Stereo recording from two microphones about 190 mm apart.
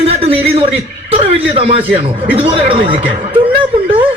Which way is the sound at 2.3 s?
30° right (ahead or behind).